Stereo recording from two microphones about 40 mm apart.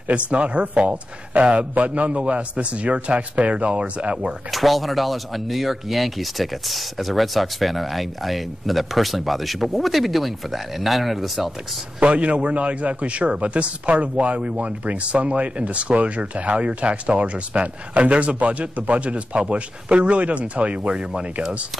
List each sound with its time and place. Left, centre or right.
0.1 s a man's voice: right
4.5 s speech: centre
12.0 s a man's voice: right